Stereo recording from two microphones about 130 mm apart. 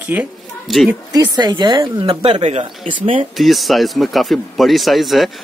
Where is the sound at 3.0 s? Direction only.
90° right.